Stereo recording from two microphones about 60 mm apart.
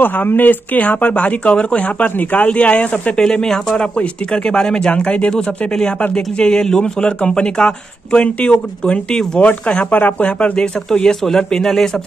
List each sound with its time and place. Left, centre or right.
0.0 s speech: left
3.2 s speech: centre